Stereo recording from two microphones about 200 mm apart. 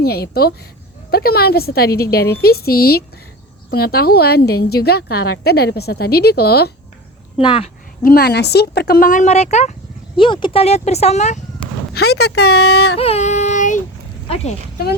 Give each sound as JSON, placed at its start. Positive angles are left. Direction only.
{"t": 0.0, "sound": "a woman's voice", "side_deg": 50}
{"t": 7.3, "sound": "speech", "side_deg": 30}
{"t": 8.0, "sound": "a woman's voice", "side_deg": 50}
{"t": 10.2, "sound": "speech", "side_deg": 25}
{"t": 11.9, "sound": "speech", "side_deg": 55}
{"t": 13.0, "sound": "child singing", "side_deg": 30}
{"t": 14.3, "sound": "speech", "side_deg": 30}